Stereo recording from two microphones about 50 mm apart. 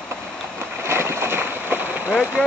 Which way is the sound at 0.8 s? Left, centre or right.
Right.